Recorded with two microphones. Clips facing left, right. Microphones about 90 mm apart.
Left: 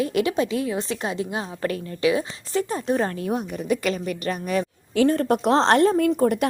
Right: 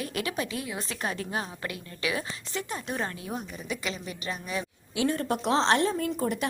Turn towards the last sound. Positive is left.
turn(degrees=50)  # may be behind; listen again after turning